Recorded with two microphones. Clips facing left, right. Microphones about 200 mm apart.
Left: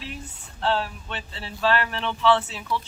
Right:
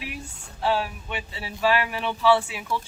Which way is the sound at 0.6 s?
10° right (ahead or behind).